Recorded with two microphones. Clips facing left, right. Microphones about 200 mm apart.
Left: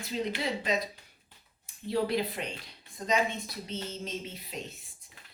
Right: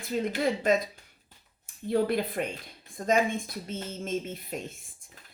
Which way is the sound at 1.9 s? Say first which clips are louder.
Right 3 dB; 50° right (ahead or behind).